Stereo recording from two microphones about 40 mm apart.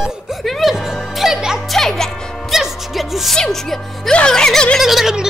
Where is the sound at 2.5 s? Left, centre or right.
Centre.